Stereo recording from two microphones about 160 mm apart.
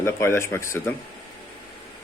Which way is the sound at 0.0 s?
15° left (ahead or behind).